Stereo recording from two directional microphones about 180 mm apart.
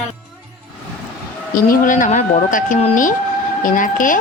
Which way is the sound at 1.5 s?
50° left (ahead or behind).